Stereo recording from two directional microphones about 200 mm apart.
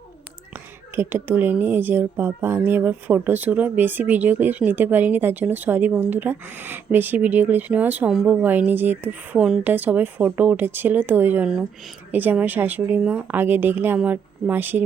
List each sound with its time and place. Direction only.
0.9 s a woman's voice: 10° right (ahead or behind)